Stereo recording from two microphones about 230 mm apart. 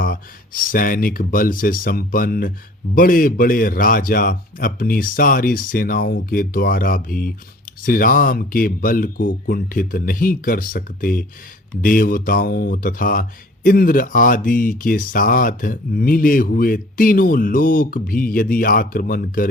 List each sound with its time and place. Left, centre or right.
0.0 s speech: left